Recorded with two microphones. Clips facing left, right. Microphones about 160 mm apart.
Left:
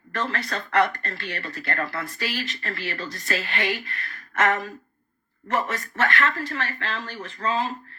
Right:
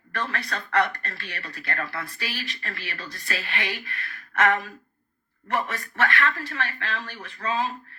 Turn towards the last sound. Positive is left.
turn(degrees=45)  # may be behind; listen again after turning